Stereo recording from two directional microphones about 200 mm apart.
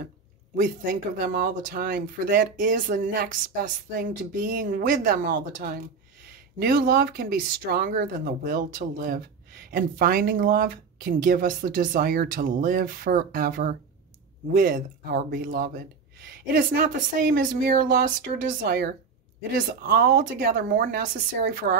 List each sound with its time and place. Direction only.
1.1 s speech: 50° right (ahead or behind)